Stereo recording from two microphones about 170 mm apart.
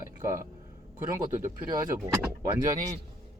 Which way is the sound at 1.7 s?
20° right (ahead or behind).